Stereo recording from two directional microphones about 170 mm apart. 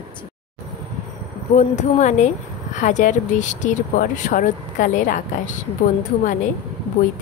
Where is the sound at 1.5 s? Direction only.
45° left (ahead or behind).